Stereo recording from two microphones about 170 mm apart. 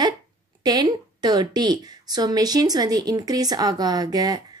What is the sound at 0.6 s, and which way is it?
A woman's voice, 25° right (ahead or behind).